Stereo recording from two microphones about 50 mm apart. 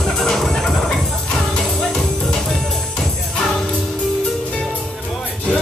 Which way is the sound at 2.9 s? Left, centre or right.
Centre.